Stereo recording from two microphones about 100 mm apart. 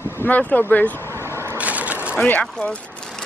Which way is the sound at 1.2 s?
25° right (ahead or behind).